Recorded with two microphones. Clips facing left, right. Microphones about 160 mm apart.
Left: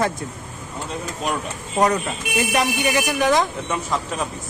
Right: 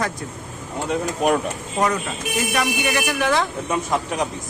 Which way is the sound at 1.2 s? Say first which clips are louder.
Right 7 dB; 60° right (ahead or behind).